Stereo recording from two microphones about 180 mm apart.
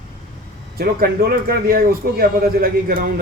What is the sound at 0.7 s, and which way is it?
A man's voice, 60° right (ahead or behind).